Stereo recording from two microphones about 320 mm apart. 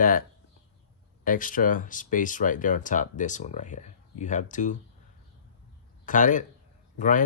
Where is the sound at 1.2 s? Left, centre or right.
Left.